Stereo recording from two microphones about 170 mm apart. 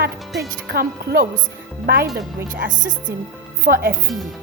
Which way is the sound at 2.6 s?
50° right (ahead or behind).